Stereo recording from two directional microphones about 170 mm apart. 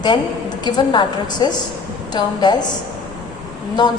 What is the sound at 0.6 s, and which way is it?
A woman's voice, 25° left (ahead or behind).